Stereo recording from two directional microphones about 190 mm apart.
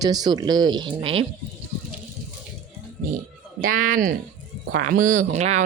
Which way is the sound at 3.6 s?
45° right (ahead or behind).